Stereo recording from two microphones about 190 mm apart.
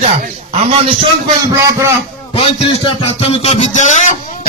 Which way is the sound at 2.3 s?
30° left (ahead or behind).